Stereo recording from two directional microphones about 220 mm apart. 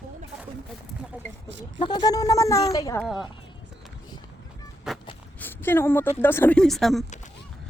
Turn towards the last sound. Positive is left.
turn(degrees=0)  # may be behind; listen again after turning